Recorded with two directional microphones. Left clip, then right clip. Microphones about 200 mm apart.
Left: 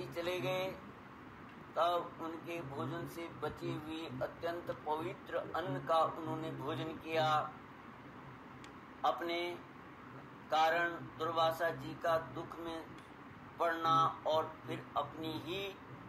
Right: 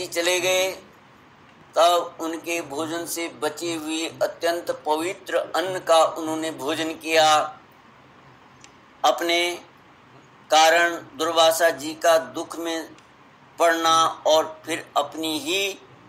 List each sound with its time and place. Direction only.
0.0 s speech: 35° right (ahead or behind)
9.0 s speech: 35° right (ahead or behind)